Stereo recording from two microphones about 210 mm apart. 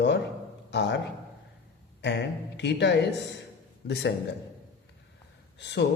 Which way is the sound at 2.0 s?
55° left (ahead or behind).